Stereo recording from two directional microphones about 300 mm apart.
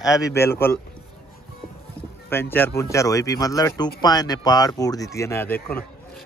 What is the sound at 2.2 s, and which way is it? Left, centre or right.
A man's voice, centre.